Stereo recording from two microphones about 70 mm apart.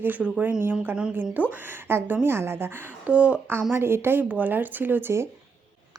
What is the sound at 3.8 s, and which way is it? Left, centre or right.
Speech, right.